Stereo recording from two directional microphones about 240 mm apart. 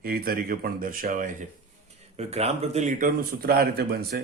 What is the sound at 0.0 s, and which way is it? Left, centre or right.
Mantra, right.